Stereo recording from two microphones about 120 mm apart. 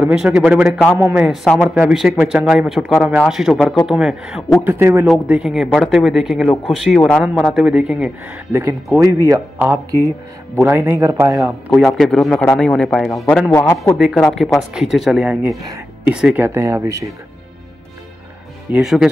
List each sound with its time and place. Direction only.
0.0 s speech: 5° right (ahead or behind)
0.7 s a man's voice: 10° left (ahead or behind)
0.9 s speech: 20° right (ahead or behind)
1.2 s speech: centre (ahead or behind)
4.6 s speech: 20° right (ahead or behind)
5.0 s speech: 5° right (ahead or behind)
7.3 s speech: 5° right (ahead or behind)
8.5 s speech: 25° right (ahead or behind)
11.4 s speech: centre (ahead or behind); by 17.1 s 25° right (ahead or behind)
18.7 s speech: 5° right (ahead or behind)